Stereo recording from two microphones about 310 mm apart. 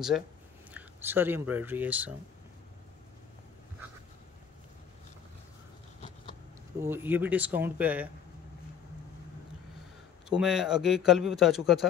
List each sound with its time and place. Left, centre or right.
0.7 s speech: centre
5.9 s vehicle: centre
6.8 s a man's voice: centre
10.3 s a man's voice: centre